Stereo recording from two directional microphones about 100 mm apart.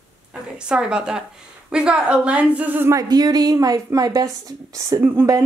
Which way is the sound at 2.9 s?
40° right (ahead or behind).